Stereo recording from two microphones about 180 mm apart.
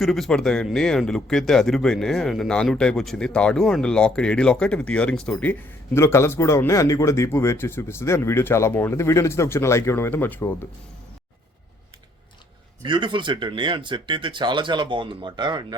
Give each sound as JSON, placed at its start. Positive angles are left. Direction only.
{"t": 0.0, "sound": "speech", "side_deg": 0}
{"t": 12.8, "sound": "speech", "side_deg": -25}